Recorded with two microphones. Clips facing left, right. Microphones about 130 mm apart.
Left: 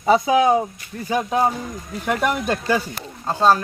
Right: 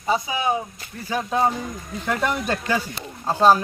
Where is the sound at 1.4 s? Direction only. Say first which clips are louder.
Left 1 dB; 5° left (ahead or behind).